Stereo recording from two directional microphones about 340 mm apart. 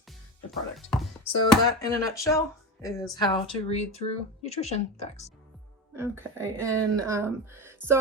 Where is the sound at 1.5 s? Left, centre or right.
Centre.